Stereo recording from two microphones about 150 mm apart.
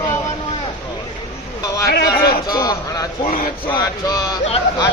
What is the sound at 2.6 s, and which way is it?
Music, 25° left (ahead or behind).